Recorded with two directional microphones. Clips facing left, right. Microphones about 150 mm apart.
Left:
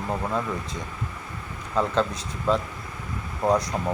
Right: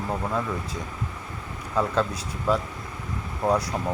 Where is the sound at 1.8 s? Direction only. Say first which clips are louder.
Left 1 dB; 5° right (ahead or behind).